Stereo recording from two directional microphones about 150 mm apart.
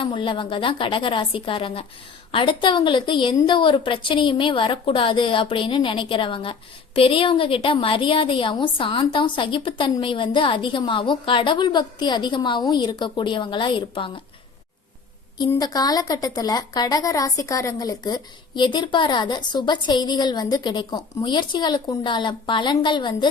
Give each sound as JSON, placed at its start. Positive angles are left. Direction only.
{"t": 0.0, "sound": "a woman's voice", "side_deg": 35}
{"t": 15.4, "sound": "speech", "side_deg": 25}